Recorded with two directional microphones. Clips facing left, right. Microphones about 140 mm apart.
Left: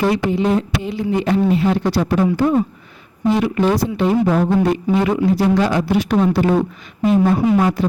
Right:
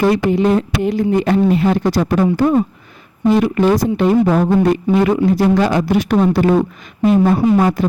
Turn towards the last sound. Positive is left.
turn(degrees=-45)  # may be behind; listen again after turning